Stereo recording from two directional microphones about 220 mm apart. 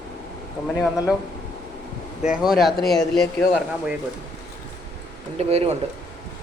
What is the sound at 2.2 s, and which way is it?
Speech, 5° right (ahead or behind).